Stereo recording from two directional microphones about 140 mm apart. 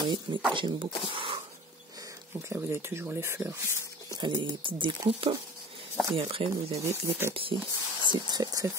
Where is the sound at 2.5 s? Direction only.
20° right (ahead or behind).